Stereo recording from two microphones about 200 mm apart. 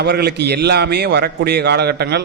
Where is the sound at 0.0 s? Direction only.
55° right (ahead or behind).